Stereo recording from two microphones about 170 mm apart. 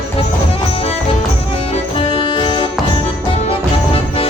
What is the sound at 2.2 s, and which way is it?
Music, 30° left (ahead or behind).